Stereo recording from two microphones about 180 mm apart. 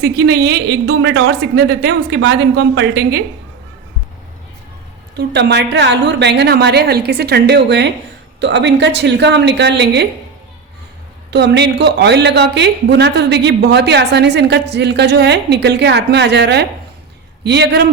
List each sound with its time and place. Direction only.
0.0 s a woman's voice: 65° right (ahead or behind)
5.1 s a woman's voice: 70° right (ahead or behind)
11.3 s a woman's voice: 70° right (ahead or behind)